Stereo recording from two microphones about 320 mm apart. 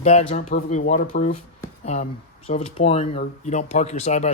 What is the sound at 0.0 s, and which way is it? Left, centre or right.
Speech, left.